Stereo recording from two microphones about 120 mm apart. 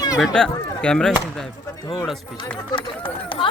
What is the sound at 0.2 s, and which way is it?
Speech, 5° left (ahead or behind).